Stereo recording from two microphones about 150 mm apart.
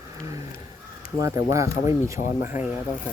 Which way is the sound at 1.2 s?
20° right (ahead or behind).